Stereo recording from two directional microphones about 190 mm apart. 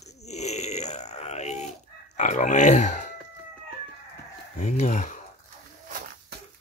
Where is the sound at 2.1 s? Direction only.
40° left (ahead or behind).